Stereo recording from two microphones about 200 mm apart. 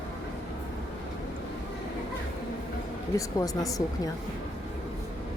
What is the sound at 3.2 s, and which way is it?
Speech, 15° left (ahead or behind).